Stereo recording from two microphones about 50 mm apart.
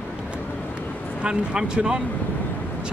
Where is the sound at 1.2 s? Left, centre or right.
Centre.